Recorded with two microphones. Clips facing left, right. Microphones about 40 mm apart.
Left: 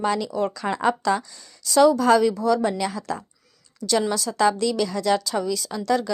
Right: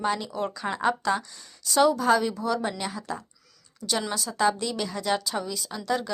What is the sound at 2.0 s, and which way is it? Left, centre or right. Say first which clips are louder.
Speech: left 5 dB; left.